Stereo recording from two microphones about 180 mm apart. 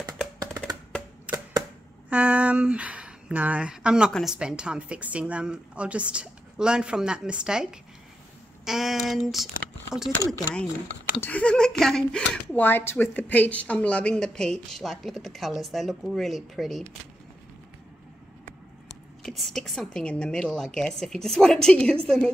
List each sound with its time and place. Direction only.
0.4 s music: 20° right (ahead or behind)
1.3 s arrow: 5° right (ahead or behind)
2.0 s speech: 10° right (ahead or behind)
8.6 s speech: centre (ahead or behind)
11.1 s speech: 10° left (ahead or behind)
19.2 s speech: centre (ahead or behind)